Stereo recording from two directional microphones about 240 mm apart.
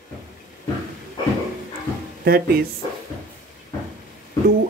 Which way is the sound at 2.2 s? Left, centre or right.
Right.